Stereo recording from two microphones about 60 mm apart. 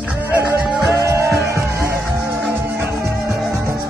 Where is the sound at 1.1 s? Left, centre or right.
Right.